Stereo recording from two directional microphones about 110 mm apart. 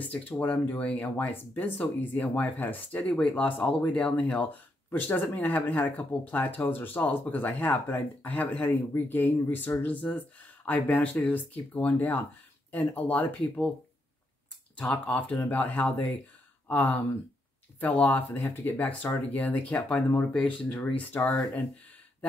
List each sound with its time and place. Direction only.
0.0 s speech: 15° left (ahead or behind)
14.8 s speech: 15° left (ahead or behind)